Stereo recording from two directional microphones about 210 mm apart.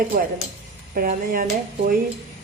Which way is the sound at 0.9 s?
40° right (ahead or behind).